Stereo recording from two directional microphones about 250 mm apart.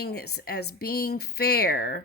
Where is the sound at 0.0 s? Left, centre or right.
Left.